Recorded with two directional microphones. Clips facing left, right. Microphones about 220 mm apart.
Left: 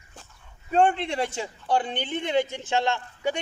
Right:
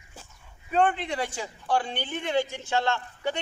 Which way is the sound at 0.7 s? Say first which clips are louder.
Left 3 dB; 25° left (ahead or behind).